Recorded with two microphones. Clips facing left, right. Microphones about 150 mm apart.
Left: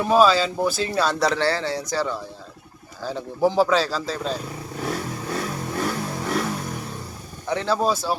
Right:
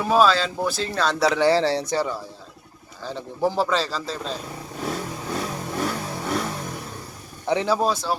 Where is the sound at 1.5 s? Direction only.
30° right (ahead or behind).